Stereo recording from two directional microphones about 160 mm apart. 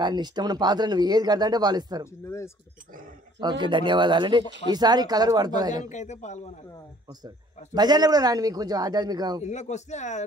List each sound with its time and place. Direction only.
0.0 s speech: 25° right (ahead or behind)
2.2 s speech: 15° left (ahead or behind)
3.3 s speech: 30° right (ahead or behind)
5.9 s speech: 45° left (ahead or behind)
7.2 s speech: 25° right (ahead or behind)
9.4 s speech: 45° left (ahead or behind)